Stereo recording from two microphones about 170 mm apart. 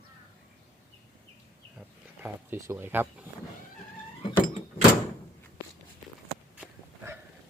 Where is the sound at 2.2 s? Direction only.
15° right (ahead or behind).